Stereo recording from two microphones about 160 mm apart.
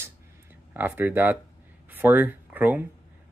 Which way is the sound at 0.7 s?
10° right (ahead or behind).